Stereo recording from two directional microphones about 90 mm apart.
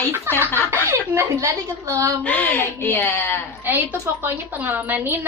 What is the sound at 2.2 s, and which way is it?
A woman's voice, 20° left (ahead or behind).